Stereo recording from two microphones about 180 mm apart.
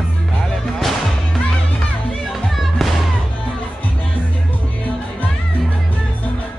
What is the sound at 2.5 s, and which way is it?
Music, centre (ahead or behind).